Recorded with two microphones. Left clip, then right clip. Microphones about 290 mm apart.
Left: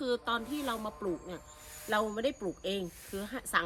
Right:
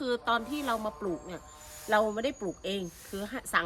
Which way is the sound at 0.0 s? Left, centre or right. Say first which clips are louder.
Right 3 dB; centre.